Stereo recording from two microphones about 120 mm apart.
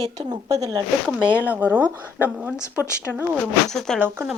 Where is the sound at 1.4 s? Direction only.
15° right (ahead or behind).